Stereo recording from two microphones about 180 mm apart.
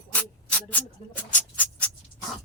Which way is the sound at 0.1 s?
10° left (ahead or behind).